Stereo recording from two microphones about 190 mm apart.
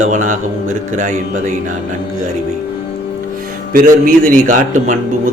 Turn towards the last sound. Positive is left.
turn(degrees=-45)  # may be behind; listen again after turning